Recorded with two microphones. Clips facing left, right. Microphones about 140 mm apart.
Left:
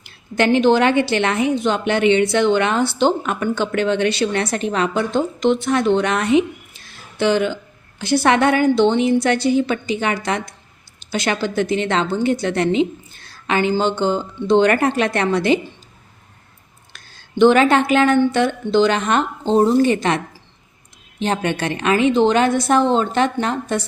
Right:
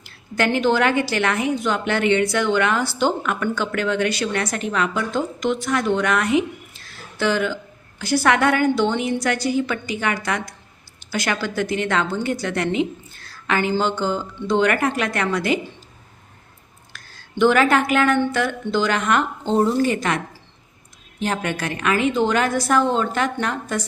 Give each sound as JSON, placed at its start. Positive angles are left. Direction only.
{"t": 0.0, "sound": "a woman's voice", "side_deg": 20}
{"t": 16.9, "sound": "a woman's voice", "side_deg": 20}
{"t": 21.2, "sound": "a woman's voice", "side_deg": 25}